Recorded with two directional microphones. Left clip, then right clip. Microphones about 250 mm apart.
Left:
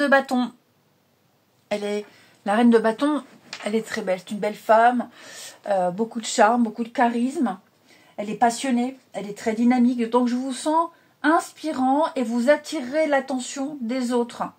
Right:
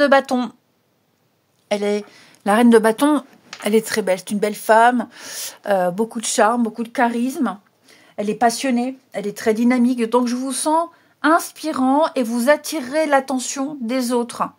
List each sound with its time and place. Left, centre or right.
0.0 s speech: right
1.7 s speech: right